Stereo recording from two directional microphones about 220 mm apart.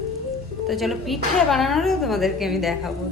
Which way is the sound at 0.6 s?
Centre (ahead or behind).